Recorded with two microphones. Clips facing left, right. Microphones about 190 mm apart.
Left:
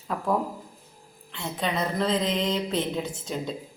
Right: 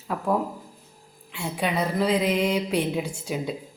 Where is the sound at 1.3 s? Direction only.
10° right (ahead or behind).